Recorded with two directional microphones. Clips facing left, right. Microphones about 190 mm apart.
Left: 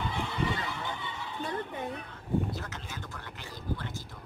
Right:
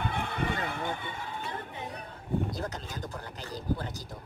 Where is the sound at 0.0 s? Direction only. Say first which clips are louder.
Even; 55° right (ahead or behind).